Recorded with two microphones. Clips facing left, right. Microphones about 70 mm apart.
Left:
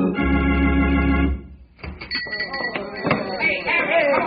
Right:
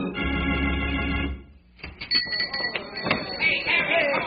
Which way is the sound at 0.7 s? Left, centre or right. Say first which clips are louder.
Left 9 dB; left.